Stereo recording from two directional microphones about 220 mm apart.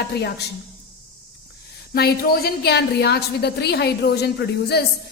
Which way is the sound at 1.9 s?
45° left (ahead or behind).